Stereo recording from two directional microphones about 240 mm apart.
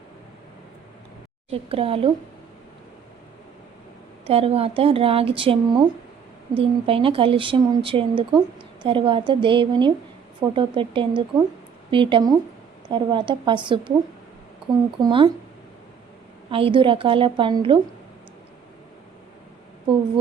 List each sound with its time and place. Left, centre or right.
1.5 s speech: right
4.3 s speech: right
15.0 s speech: right
16.5 s speech: right